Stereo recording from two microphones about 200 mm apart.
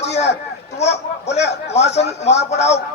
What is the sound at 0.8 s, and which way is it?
Speech, 60° left (ahead or behind).